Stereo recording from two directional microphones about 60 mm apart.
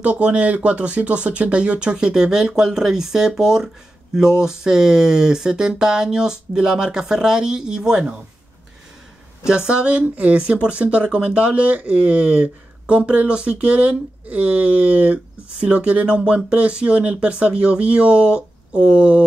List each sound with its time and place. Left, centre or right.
0.0 s speech: right
9.5 s speech: centre